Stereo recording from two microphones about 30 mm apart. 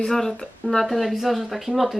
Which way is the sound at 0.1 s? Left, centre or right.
Centre.